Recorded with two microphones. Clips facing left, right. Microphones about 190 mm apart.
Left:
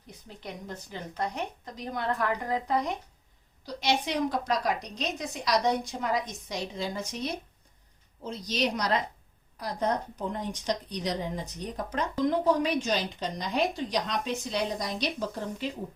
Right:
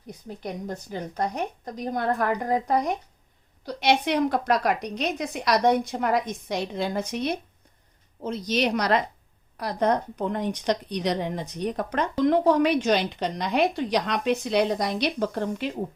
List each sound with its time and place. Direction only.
0.3 s a woman's voice: 45° right (ahead or behind)
3.7 s a woman's voice: 60° right (ahead or behind)